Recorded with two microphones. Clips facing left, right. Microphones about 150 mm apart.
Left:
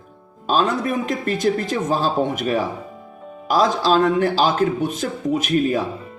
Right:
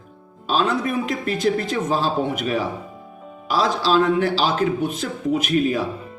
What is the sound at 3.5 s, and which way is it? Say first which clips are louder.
Speech: left 3 dB; 45° left (ahead or behind).